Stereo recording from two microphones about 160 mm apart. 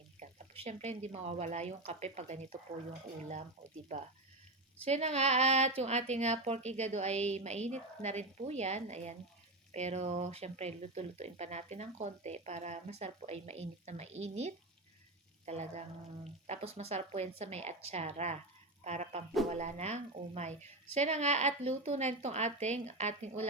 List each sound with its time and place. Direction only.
0.2 s speech: 45° right (ahead or behind)
3.9 s speech: 50° right (ahead or behind)